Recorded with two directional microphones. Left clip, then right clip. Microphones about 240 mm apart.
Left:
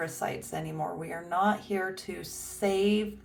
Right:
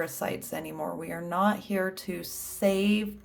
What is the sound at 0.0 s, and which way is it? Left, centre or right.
Speech, right.